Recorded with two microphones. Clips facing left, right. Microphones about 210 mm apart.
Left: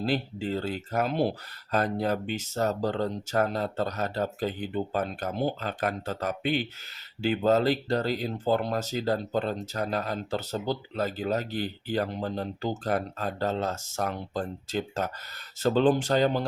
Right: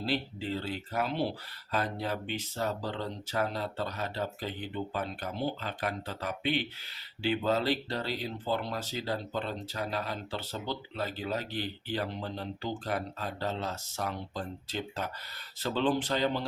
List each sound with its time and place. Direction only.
0.0 s speech: 50° left (ahead or behind)